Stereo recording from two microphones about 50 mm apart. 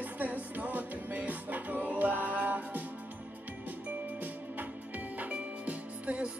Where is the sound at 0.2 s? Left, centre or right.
Right.